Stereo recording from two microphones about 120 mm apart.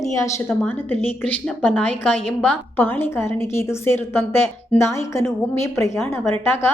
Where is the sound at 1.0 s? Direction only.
15° left (ahead or behind).